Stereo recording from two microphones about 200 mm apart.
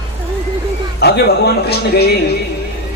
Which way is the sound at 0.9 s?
55° left (ahead or behind).